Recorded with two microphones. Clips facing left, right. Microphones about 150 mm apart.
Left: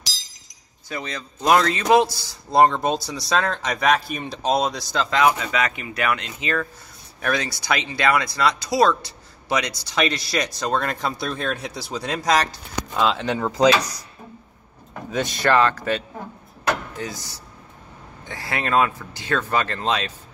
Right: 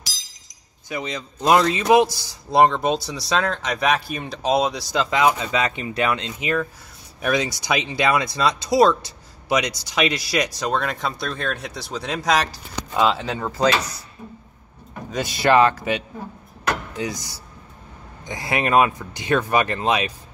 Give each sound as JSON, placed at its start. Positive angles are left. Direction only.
{"t": 0.8, "sound": "speech", "side_deg": -15}
{"t": 2.7, "sound": "speech", "side_deg": -5}
{"t": 4.9, "sound": "speech", "side_deg": -15}
{"t": 6.4, "sound": "speech", "side_deg": -15}
{"t": 10.7, "sound": "speech", "side_deg": 0}
{"t": 13.5, "sound": "speech", "side_deg": 15}
{"t": 15.0, "sound": "speech", "side_deg": -5}